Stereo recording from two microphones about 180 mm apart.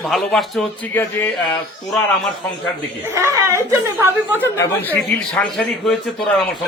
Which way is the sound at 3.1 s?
15° right (ahead or behind).